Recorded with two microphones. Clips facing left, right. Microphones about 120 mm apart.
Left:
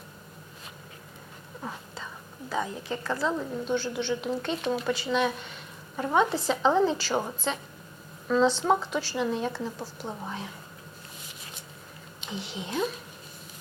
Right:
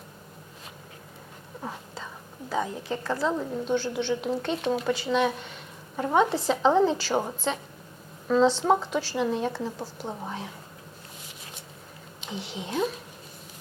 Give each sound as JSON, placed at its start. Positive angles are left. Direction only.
{"t": 1.6, "sound": "whispering", "side_deg": -35}
{"t": 2.5, "sound": "a woman's voice", "side_deg": -35}
{"t": 3.8, "sound": "a woman's voice", "side_deg": -45}
{"t": 12.4, "sound": "a woman's voice", "side_deg": -40}